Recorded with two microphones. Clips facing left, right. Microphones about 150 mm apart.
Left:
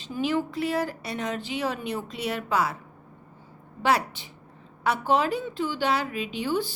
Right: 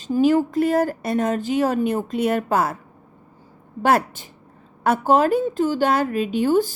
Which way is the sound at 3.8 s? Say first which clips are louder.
Right 5 dB; 50° right (ahead or behind).